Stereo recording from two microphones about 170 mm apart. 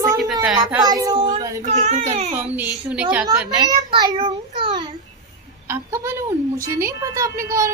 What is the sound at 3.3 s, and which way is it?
Speech, 20° right (ahead or behind).